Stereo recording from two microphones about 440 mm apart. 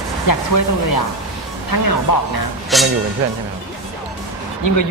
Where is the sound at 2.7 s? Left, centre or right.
Centre.